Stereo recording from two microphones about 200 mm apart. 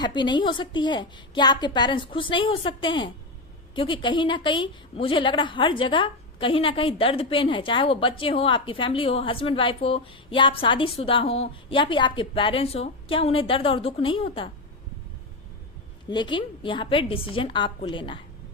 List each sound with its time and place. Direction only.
0.0 s a woman's voice: 20° left (ahead or behind)
16.0 s a woman's voice: 25° left (ahead or behind)